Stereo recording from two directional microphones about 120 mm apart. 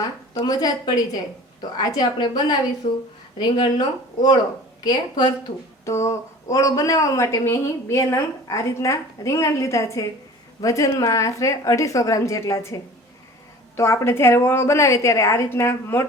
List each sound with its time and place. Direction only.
0.3 s speech: 35° left (ahead or behind)
2.8 s a woman's voice: 90° left
3.3 s speech: 40° left (ahead or behind)
5.8 s speech: 25° left (ahead or behind)